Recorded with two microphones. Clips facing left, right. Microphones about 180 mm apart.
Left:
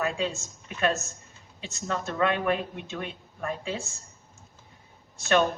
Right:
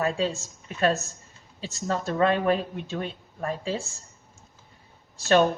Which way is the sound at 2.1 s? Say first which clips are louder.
Right 3 dB; 30° right (ahead or behind).